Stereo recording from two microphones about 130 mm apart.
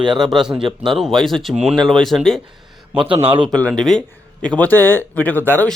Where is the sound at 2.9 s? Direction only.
45° right (ahead or behind).